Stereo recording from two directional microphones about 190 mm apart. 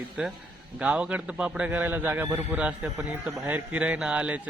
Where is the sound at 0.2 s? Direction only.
5° right (ahead or behind).